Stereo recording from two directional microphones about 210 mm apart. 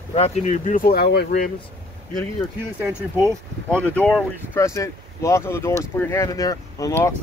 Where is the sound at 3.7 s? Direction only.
5° left (ahead or behind).